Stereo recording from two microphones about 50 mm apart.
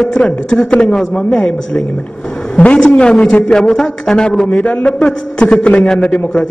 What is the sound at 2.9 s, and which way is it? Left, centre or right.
A man's voice, centre.